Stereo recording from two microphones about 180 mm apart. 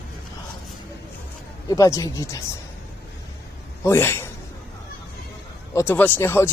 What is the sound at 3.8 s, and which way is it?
Speech, 15° left (ahead or behind).